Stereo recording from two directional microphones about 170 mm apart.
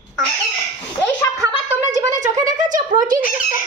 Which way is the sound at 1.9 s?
50° right (ahead or behind).